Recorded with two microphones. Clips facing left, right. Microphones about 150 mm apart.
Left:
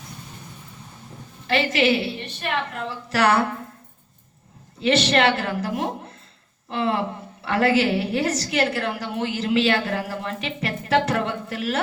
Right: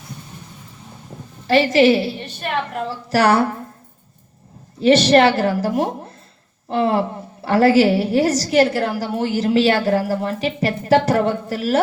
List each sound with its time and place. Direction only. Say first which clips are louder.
1.5 s a woman's voice: right 7 dB; 35° right (ahead or behind)
4.8 s a woman's voice: right 7 dB; 35° right (ahead or behind)